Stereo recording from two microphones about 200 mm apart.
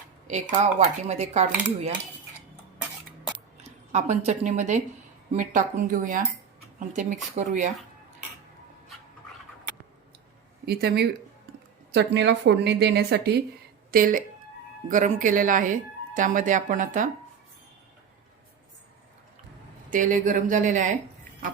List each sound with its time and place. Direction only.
0.3 s speech: 35° right (ahead or behind)
3.3 s a sound: 35° right (ahead or behind)
5.3 s speech: 40° right (ahead or behind)
10.7 s a woman's voice: 50° right (ahead or behind)
13.9 s speech: 45° right (ahead or behind)
19.9 s speech: 40° right (ahead or behind)